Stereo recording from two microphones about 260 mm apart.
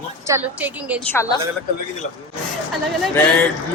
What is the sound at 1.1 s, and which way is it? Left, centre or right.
Speech, centre.